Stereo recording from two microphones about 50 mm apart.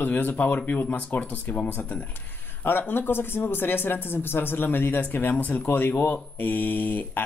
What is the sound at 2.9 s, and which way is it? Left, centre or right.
Speech, left.